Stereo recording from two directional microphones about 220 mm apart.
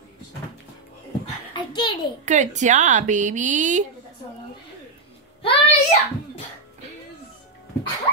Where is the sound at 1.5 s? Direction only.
20° left (ahead or behind).